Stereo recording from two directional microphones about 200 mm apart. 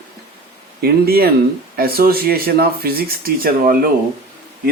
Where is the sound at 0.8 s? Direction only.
50° right (ahead or behind).